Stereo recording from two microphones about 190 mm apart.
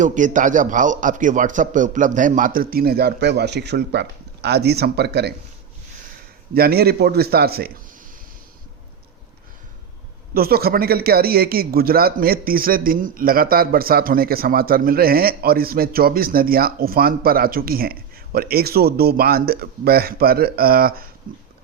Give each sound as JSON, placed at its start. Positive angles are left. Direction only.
{"t": 0.0, "sound": "a man's voice", "side_deg": -40}
{"t": 6.5, "sound": "a man's voice", "side_deg": -55}
{"t": 10.3, "sound": "a man's voice", "side_deg": -55}